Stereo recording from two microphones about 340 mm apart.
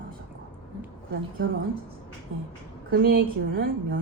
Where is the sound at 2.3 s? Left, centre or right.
Right.